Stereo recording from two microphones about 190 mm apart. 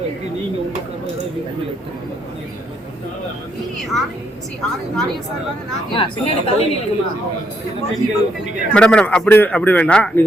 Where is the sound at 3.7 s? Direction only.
Centre (ahead or behind).